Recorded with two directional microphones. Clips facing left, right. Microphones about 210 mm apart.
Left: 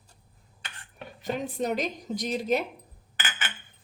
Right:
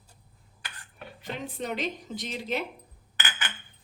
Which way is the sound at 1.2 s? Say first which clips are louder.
Left 5 dB; 40° left (ahead or behind).